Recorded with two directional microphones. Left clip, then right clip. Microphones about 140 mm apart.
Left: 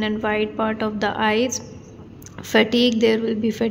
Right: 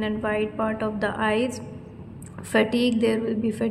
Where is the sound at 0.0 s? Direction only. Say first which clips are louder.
Left 3 dB; 20° left (ahead or behind).